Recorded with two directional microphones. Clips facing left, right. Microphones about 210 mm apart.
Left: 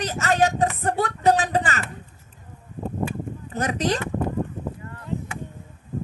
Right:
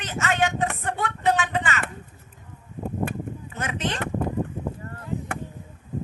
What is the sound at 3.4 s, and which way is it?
Speech, 35° left (ahead or behind).